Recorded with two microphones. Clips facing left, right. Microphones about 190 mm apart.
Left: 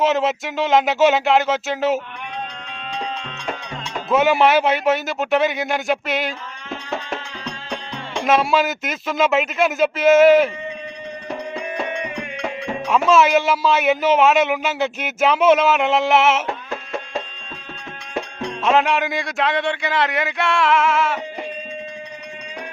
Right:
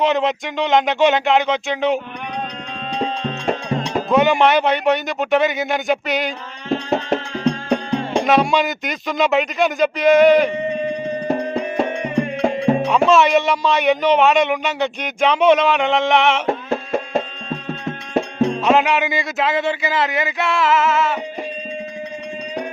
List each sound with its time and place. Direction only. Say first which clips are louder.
0.0 s speech: right 1 dB; 5° left (ahead or behind)
2.9 s music: right 6 dB; 35° right (ahead or behind)
4.1 s speech: right 1 dB; 5° left (ahead or behind)
6.7 s music: right 9 dB; 30° right (ahead or behind)
7.7 s music: right 10 dB; 50° right (ahead or behind)
8.2 s speech: left 1 dB; centre (ahead or behind)
11.6 s music: right 5 dB; 35° right (ahead or behind)
13.1 s speech: left 1 dB; centre (ahead or behind)
17.2 s music: right 7 dB; 40° right (ahead or behind)
18.6 s speech: left 2 dB; centre (ahead or behind)